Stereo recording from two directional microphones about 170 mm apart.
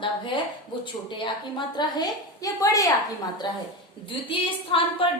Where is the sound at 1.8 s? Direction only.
25° left (ahead or behind).